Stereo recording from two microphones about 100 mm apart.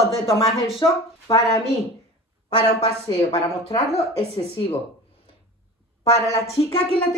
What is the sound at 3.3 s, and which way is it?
Speech, 85° left.